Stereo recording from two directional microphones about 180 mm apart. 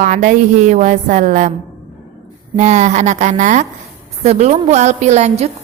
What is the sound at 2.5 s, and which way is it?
A woman's voice, 40° right (ahead or behind).